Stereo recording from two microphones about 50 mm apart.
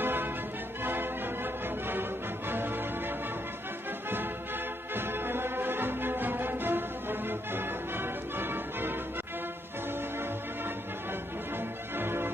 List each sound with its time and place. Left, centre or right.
0.0 s music: right
4.9 s music: right
11.5 s music: right